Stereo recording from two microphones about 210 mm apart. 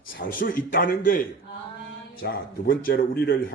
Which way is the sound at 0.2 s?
40° left (ahead or behind).